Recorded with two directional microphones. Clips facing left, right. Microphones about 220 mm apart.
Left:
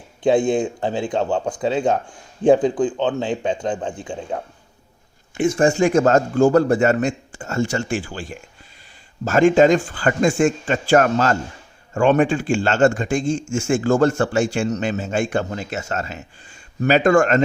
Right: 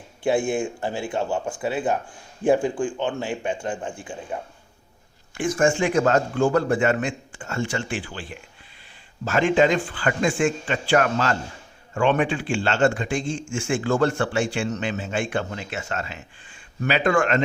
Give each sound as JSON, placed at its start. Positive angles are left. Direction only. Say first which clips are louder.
{"t": 0.5, "sound": "speech", "louder": "left 5 dB", "side_deg": 20}
{"t": 2.4, "sound": "speech", "louder": "left 5 dB", "side_deg": 20}
{"t": 5.4, "sound": "a man's voice", "louder": "left 4 dB", "side_deg": 30}